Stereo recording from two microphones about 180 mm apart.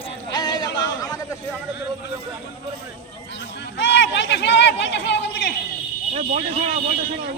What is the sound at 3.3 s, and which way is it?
Speech, 70° left (ahead or behind).